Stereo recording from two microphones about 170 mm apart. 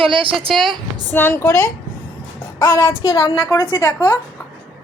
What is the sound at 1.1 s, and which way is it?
A woman's voice, 10° left (ahead or behind).